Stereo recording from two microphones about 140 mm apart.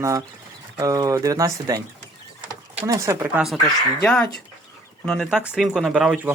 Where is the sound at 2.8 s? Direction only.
25° right (ahead or behind).